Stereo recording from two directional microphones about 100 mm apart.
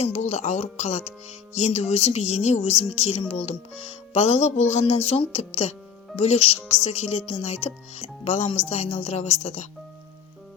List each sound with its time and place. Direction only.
0.0 s speech: 90° left